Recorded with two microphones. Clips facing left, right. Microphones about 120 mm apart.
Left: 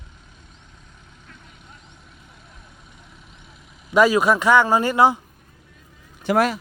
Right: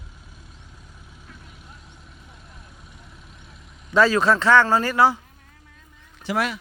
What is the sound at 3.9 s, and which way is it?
Speech, 15° left (ahead or behind).